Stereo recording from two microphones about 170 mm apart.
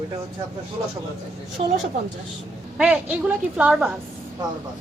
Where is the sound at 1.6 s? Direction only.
35° right (ahead or behind).